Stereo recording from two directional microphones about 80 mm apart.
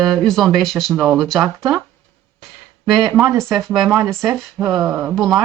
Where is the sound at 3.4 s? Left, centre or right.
Centre.